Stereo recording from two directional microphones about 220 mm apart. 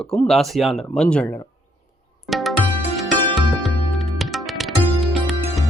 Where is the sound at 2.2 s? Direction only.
Centre (ahead or behind).